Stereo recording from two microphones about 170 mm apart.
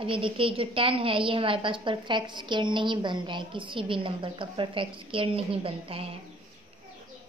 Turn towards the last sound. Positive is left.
turn(degrees=-35)  # may be behind; listen again after turning